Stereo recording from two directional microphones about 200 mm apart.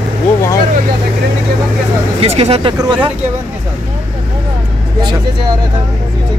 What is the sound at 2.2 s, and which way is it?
Speech, 30° right (ahead or behind).